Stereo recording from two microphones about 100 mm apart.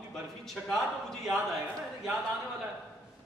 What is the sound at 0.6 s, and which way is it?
Speech, 15° right (ahead or behind).